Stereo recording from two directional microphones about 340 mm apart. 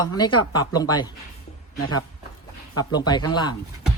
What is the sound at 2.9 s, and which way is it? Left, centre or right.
Speech, centre.